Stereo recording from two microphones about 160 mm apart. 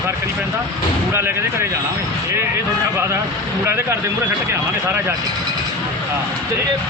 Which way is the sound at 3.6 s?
15° right (ahead or behind).